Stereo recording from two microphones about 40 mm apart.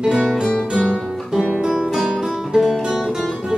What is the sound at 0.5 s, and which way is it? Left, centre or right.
Music, left.